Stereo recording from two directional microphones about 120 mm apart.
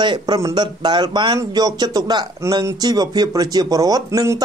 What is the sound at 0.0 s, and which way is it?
Speech, 40° right (ahead or behind).